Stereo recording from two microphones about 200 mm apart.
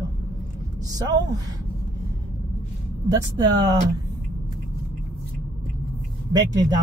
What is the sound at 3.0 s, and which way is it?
Speech, 20° right (ahead or behind).